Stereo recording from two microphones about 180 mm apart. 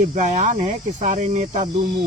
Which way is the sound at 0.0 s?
40° right (ahead or behind).